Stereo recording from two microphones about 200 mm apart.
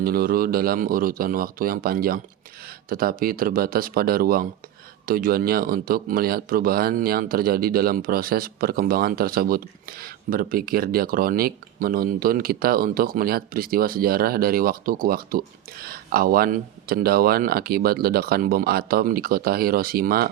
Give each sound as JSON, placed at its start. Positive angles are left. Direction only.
{"t": 0.0, "sound": "speech", "side_deg": -50}